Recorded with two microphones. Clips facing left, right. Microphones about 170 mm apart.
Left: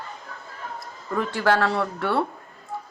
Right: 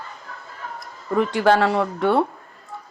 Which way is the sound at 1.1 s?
20° right (ahead or behind).